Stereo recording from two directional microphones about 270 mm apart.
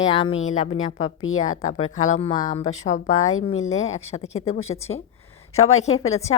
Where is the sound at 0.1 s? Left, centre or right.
Left.